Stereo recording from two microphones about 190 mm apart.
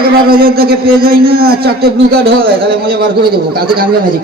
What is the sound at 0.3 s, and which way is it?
A man's voice, 50° right (ahead or behind).